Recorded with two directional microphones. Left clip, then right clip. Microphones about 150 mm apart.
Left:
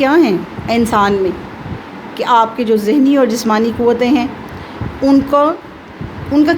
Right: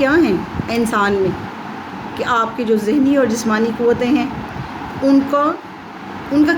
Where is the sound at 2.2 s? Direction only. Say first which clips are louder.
Left 6 dB; 45° left (ahead or behind).